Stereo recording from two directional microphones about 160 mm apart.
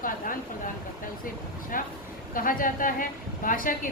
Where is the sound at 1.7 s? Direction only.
60° left (ahead or behind).